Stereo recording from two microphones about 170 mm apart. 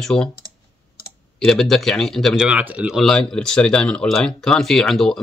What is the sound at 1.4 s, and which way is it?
Speech, 5° left (ahead or behind).